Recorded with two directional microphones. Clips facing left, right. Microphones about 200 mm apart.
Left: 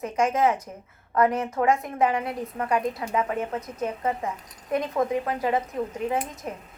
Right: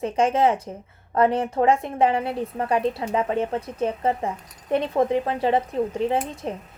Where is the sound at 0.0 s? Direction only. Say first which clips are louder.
Right 3 dB; 30° right (ahead or behind).